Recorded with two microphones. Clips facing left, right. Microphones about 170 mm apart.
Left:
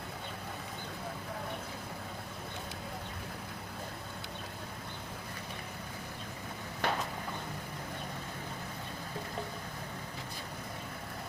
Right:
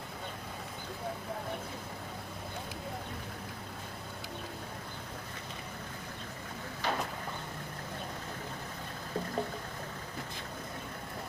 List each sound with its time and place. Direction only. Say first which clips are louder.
6.8 s vehicle: left 1 dB; 60° left (ahead or behind)